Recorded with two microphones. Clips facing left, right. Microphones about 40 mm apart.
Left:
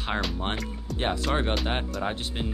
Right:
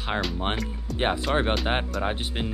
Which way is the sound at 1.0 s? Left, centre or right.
Centre.